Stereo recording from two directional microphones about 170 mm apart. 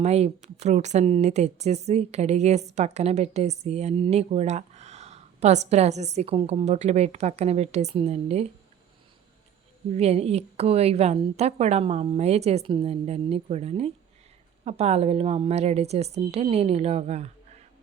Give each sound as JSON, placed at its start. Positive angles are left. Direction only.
{"t": 0.0, "sound": "a woman's voice", "side_deg": -40}
{"t": 9.9, "sound": "a woman's voice", "side_deg": -40}